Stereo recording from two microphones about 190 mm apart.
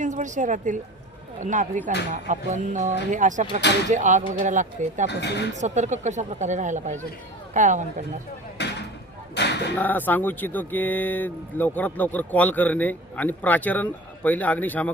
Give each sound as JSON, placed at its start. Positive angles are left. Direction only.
{"t": 0.0, "sound": "speech", "side_deg": -40}
{"t": 5.0, "sound": "speech", "side_deg": 60}
{"t": 5.5, "sound": "speech", "side_deg": -40}
{"t": 8.5, "sound": "a sound", "side_deg": 65}
{"t": 9.7, "sound": "speech", "side_deg": 10}